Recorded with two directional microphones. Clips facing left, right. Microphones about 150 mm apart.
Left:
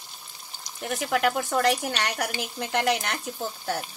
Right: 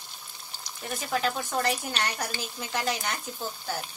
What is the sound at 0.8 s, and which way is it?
Speech, 70° left (ahead or behind).